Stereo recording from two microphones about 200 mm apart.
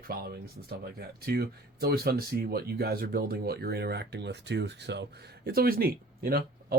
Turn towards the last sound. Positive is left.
turn(degrees=-45)  # may be behind; listen again after turning